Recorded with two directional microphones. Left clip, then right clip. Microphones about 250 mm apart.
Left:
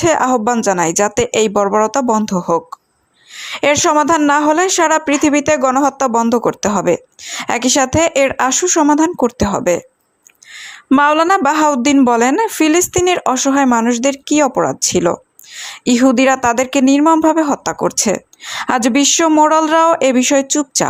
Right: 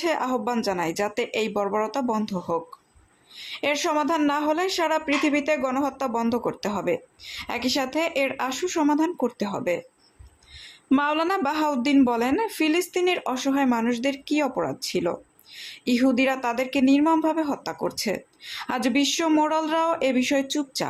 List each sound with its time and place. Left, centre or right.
0.0 s speech: left